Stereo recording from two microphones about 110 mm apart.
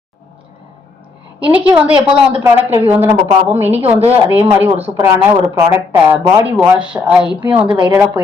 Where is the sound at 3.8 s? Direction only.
70° right (ahead or behind).